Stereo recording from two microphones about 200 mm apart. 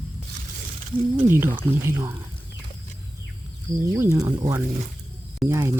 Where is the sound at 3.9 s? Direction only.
15° right (ahead or behind).